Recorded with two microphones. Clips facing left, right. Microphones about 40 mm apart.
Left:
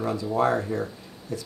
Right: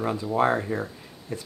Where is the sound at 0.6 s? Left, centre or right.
Centre.